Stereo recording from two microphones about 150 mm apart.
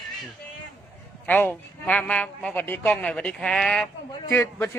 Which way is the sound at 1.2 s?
10° left (ahead or behind).